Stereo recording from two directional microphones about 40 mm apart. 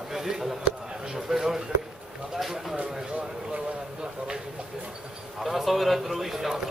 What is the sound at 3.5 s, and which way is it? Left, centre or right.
Speech, right.